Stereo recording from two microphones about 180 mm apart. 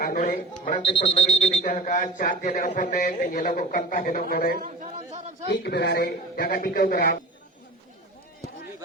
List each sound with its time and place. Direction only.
0.0 s a man's voice: 50° left (ahead or behind)
0.9 s a man's voice: 30° left (ahead or behind); by 4.6 s 55° left (ahead or behind)
5.5 s speech: 65° left (ahead or behind)